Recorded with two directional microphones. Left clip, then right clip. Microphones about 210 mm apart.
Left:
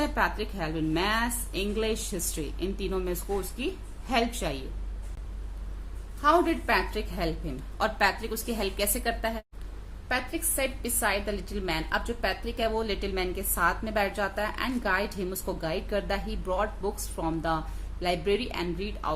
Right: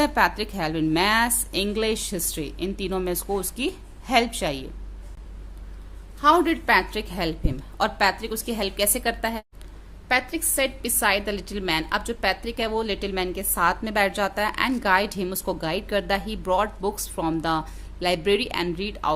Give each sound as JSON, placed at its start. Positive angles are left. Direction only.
{"t": 0.0, "sound": "a woman's voice", "side_deg": -45}
{"t": 6.2, "sound": "a woman's voice", "side_deg": -40}